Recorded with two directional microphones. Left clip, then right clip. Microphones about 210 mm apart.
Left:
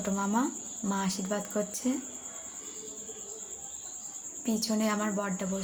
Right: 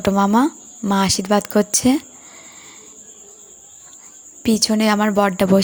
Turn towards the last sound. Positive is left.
turn(degrees=-50)  # may be behind; listen again after turning